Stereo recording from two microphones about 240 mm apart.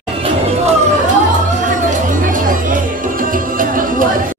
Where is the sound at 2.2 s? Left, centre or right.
Right.